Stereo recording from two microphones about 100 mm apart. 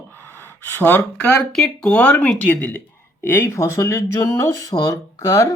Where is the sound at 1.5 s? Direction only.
5° left (ahead or behind).